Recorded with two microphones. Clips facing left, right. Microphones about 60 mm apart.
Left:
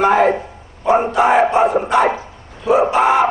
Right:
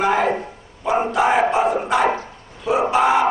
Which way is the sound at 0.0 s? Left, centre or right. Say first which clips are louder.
Left 5 dB; centre.